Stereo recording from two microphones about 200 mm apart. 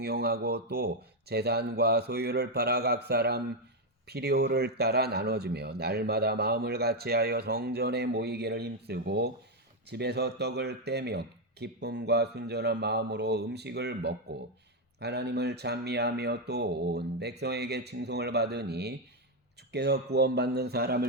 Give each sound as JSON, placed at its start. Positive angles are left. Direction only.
{"t": 0.0, "sound": "a man's voice", "side_deg": -50}